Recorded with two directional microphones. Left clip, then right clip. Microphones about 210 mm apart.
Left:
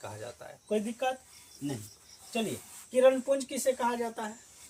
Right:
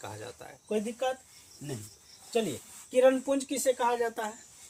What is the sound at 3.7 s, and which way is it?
Speech, 25° right (ahead or behind).